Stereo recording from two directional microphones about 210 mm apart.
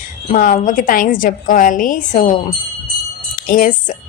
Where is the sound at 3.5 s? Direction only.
40° left (ahead or behind).